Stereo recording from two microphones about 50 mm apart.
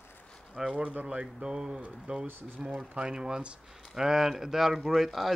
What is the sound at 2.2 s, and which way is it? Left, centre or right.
Speech, right.